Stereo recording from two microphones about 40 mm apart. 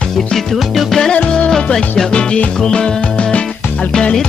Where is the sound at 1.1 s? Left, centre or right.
Left.